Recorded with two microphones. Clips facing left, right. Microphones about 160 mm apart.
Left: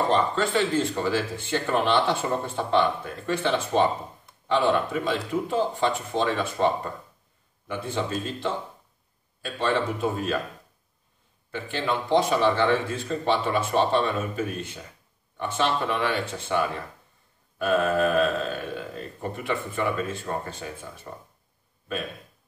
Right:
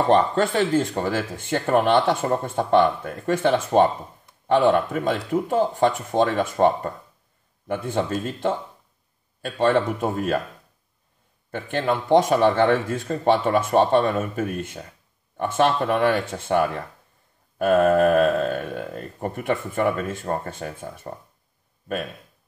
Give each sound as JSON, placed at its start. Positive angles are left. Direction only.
{"t": 0.1, "sound": "speech", "side_deg": -55}
{"t": 11.5, "sound": "speech", "side_deg": -50}